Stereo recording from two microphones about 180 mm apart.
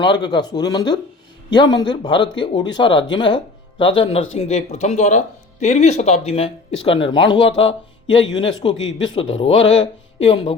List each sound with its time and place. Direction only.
0.0 s speech: 25° left (ahead or behind)